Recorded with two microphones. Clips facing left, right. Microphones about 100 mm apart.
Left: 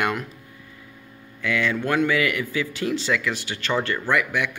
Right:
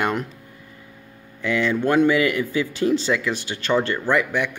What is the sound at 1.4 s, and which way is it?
A man's voice, 25° right (ahead or behind).